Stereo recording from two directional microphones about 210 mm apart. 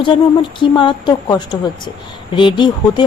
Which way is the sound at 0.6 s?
25° left (ahead or behind).